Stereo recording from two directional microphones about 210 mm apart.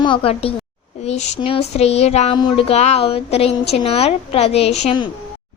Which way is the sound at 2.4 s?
25° left (ahead or behind).